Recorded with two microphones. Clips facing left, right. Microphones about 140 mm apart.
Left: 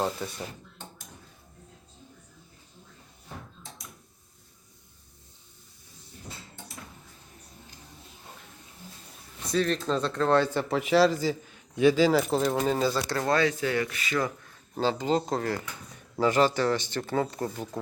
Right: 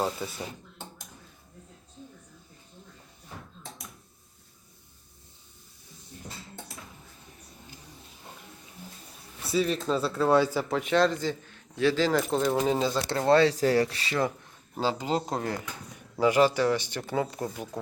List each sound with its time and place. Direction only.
0.0 s speech: centre (ahead or behind)
9.4 s speech: 5° right (ahead or behind)
12.6 s speech: 20° right (ahead or behind)
14.8 s speech: 10° right (ahead or behind)